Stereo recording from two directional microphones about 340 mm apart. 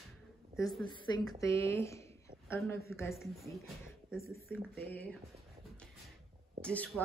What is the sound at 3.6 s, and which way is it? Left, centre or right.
Speech, right.